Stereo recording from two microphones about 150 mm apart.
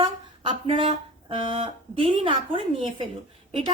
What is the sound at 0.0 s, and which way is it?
Speech, 35° right (ahead or behind).